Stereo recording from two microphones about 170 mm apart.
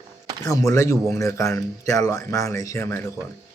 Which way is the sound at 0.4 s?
20° left (ahead or behind).